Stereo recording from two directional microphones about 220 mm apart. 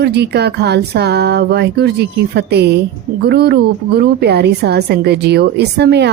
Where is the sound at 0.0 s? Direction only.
50° right (ahead or behind).